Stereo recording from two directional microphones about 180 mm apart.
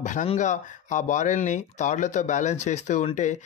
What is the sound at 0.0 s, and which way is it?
Speech, 45° left (ahead or behind).